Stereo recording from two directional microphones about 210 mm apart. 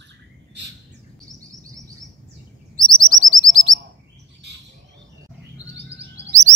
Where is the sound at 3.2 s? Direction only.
40° right (ahead or behind).